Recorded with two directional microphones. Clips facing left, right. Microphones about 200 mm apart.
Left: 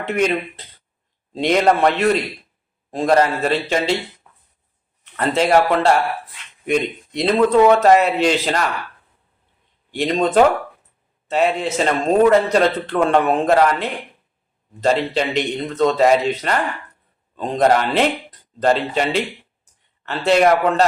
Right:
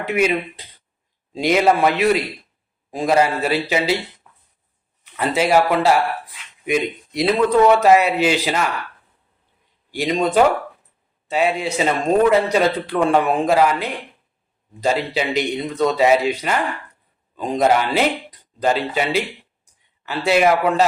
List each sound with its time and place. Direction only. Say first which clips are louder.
0.1 s speech: even; 10° right (ahead or behind)
5.1 s speech: left 1 dB; 5° right (ahead or behind)
9.9 s speech: left 1 dB; centre (ahead or behind)
11.3 s speech: left 1 dB; centre (ahead or behind)